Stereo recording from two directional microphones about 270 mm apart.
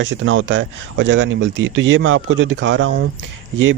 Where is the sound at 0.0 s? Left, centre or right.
Right.